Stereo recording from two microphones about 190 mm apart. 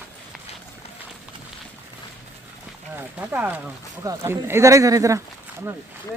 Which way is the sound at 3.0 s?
10° right (ahead or behind).